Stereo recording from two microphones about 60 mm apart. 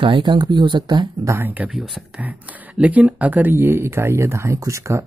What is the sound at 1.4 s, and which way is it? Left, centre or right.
Speech, right.